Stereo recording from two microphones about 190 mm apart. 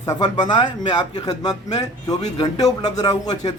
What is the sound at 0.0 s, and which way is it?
A man's voice, 20° left (ahead or behind).